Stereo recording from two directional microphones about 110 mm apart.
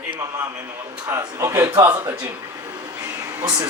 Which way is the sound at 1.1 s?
25° right (ahead or behind).